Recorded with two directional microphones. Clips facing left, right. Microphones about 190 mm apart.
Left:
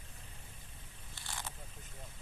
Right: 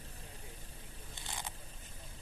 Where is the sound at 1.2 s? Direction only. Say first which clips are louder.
Right 1 dB; 20° right (ahead or behind).